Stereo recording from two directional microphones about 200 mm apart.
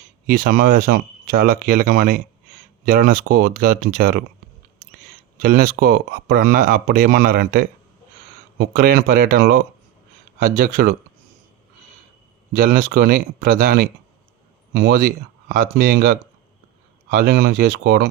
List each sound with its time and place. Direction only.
0.3 s speech: 45° right (ahead or behind)
5.4 s speech: 45° right (ahead or behind)
12.5 s speech: 45° right (ahead or behind)